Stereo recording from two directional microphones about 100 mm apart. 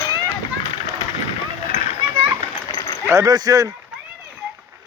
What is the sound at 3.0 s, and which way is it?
Speech, 35° right (ahead or behind).